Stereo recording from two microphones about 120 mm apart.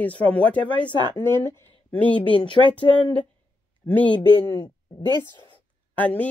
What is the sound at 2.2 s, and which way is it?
Speech, 45° left (ahead or behind).